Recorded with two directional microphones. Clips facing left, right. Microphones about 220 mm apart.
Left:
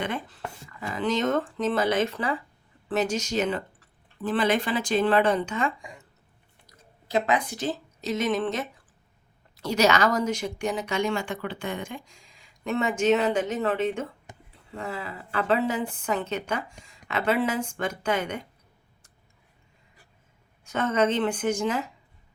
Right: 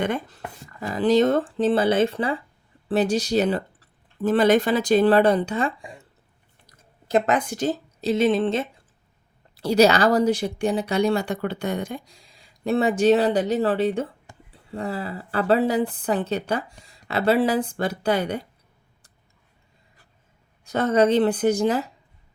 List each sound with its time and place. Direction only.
0.0 s speech: 40° right (ahead or behind)
7.1 s speech: 45° right (ahead or behind)
8.0 s speech: 30° right (ahead or behind)
14.3 s a sound: 20° left (ahead or behind)
14.7 s speech: 35° right (ahead or behind)
20.7 s speech: 35° right (ahead or behind)